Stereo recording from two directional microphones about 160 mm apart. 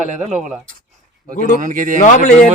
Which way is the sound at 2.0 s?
45° left (ahead or behind).